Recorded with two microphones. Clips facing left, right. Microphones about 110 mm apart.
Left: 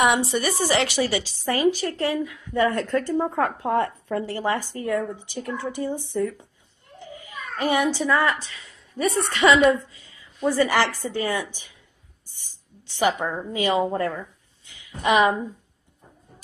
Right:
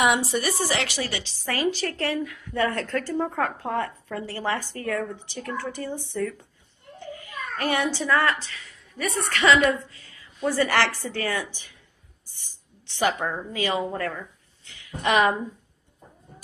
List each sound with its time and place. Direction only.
0.0 s a woman's voice: centre (ahead or behind)
1.4 s speech: 20° left (ahead or behind)
7.5 s a woman's voice: 15° left (ahead or behind)
13.3 s speech: 20° left (ahead or behind)
15.0 s speech: 5° left (ahead or behind)